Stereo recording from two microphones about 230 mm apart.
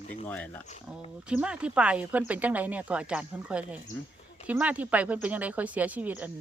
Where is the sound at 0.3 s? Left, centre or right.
Centre.